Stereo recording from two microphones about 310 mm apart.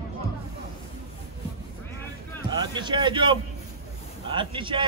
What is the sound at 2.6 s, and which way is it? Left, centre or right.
A man's voice, centre.